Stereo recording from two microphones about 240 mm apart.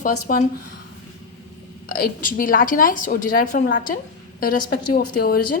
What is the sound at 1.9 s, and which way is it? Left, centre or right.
A woman's voice, left.